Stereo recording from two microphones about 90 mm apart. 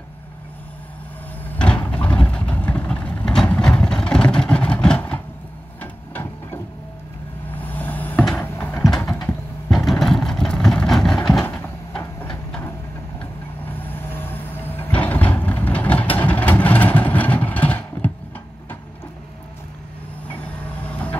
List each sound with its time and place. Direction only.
1.6 s vehicle: 10° left (ahead or behind)
5.8 s a sound: 20° left (ahead or behind)
7.5 s vehicle: 20° left (ahead or behind)
8.4 s a sound: 20° left (ahead or behind)
9.8 s vehicle: 5° left (ahead or behind)
11.5 s cupboard open or close: 15° left (ahead or behind)
13.2 s vehicle: 20° left (ahead or behind)